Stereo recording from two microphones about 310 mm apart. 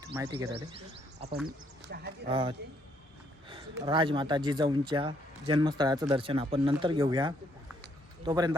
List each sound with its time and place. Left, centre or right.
0.0 s speech: centre
1.5 s speech: right
2.3 s speech: centre